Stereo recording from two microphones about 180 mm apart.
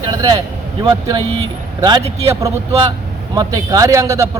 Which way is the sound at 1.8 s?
20° right (ahead or behind).